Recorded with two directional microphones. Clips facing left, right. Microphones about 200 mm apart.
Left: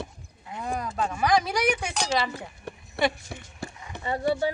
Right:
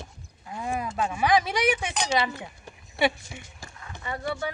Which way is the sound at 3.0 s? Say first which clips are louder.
Right 1 dB; 65° left (ahead or behind).